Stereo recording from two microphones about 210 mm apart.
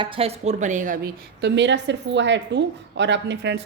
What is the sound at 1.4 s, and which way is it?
A woman's voice, 55° right (ahead or behind).